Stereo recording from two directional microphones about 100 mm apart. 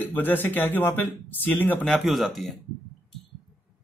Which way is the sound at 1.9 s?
Centre (ahead or behind).